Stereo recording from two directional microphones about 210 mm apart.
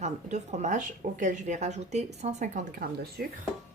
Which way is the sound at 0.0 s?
35° right (ahead or behind).